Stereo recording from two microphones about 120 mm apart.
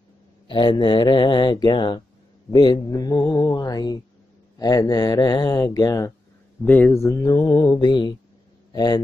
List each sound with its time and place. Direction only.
0.5 s speech: 45° left (ahead or behind); by 6.1 s 30° left (ahead or behind)
6.6 s speech: 15° left (ahead or behind); by 9.0 s 35° left (ahead or behind)